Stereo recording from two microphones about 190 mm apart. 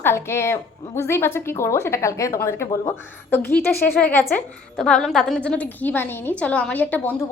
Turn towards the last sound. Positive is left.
turn(degrees=10)  # may be behind; listen again after turning